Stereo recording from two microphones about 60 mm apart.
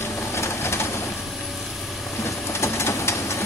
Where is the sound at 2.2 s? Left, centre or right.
Left.